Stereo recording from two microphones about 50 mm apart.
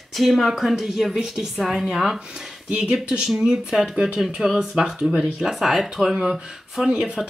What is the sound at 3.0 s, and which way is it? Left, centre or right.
Speech, right.